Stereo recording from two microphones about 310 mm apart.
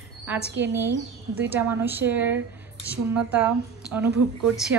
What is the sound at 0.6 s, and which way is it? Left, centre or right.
A woman's voice, centre.